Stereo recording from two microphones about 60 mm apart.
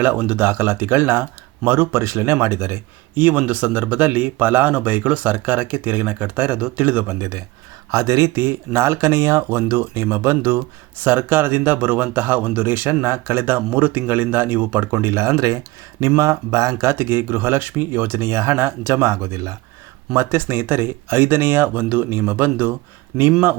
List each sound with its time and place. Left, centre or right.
0.0 s speech: right
7.2 s speech: right
15.0 s speech: right
15.4 s speech: right
16.0 s speech: right
20.1 s speech: right
23.1 s speech: centre